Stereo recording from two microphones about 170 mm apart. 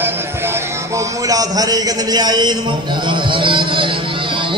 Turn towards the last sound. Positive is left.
turn(degrees=-30)  # may be behind; listen again after turning